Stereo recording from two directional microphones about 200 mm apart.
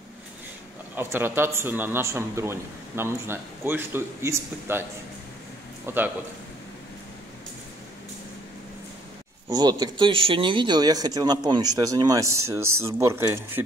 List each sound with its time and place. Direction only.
0.9 s a man's voice: 10° right (ahead or behind)
5.9 s a man's voice: 10° right (ahead or behind)
9.5 s speech: 20° right (ahead or behind)